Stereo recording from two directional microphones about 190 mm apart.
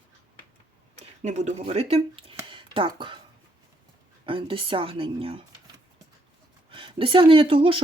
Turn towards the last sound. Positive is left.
turn(degrees=-30)  # may be behind; listen again after turning